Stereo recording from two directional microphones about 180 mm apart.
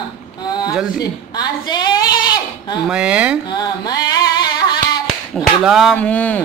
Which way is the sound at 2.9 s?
5° right (ahead or behind).